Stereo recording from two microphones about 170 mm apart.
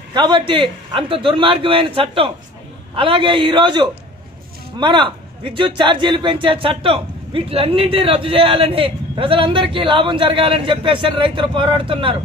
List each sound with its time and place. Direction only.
0.1 s a man's voice: 25° right (ahead or behind)